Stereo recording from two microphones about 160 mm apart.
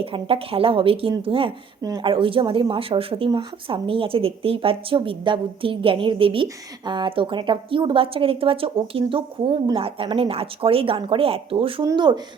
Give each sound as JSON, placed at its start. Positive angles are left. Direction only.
{"t": 0.0, "sound": "speech", "side_deg": -35}
{"t": 1.8, "sound": "speech", "side_deg": -20}
{"t": 2.0, "sound": "speech", "side_deg": -35}